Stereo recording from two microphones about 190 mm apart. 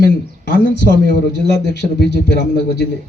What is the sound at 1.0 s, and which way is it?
A man's voice, 65° left (ahead or behind).